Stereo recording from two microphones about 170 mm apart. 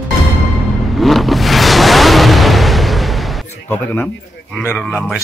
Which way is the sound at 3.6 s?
10° left (ahead or behind).